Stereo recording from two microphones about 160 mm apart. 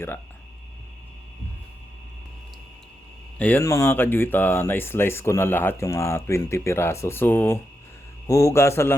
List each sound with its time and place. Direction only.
3.3 s speech: 10° left (ahead or behind)